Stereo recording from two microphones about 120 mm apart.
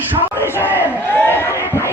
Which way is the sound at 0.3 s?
20° left (ahead or behind).